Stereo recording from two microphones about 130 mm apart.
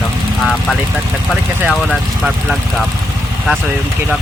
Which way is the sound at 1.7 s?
Centre (ahead or behind).